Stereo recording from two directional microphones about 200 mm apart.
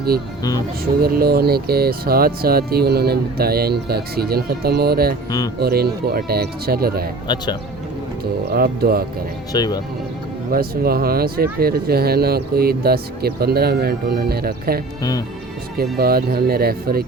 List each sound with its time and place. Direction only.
1.0 s speech: 50° right (ahead or behind)
7.3 s speech: 20° left (ahead or behind)
8.2 s speech: 50° right (ahead or behind)
9.5 s speech: 20° left (ahead or behind)
10.5 s speech: 50° right (ahead or behind)
15.8 s speech: 50° right (ahead or behind)